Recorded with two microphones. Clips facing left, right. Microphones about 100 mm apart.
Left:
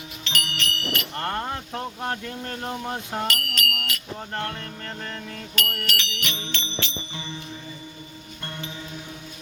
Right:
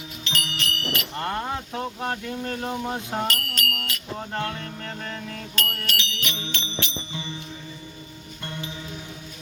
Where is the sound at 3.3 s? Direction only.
35° right (ahead or behind).